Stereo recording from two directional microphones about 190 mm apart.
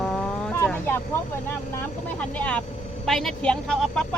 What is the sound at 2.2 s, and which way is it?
A woman's voice, 5° left (ahead or behind).